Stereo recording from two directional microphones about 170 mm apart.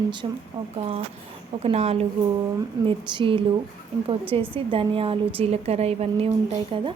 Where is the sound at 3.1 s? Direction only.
30° right (ahead or behind).